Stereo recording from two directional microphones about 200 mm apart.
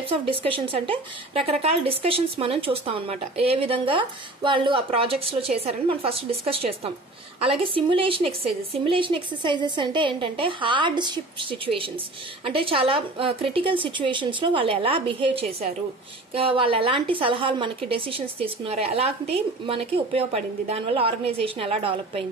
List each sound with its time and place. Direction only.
0.1 s speech: 25° right (ahead or behind)